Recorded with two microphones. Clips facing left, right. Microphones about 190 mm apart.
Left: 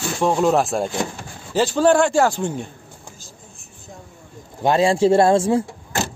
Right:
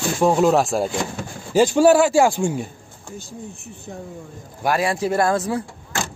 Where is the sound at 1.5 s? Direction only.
10° right (ahead or behind).